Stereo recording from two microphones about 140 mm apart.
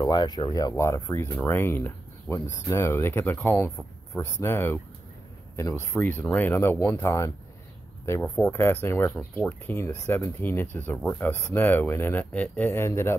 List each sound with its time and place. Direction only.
0.0 s speech: 30° left (ahead or behind)